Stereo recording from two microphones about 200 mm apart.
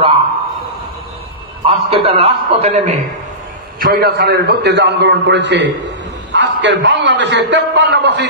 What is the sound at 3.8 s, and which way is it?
A man's voice, 50° right (ahead or behind).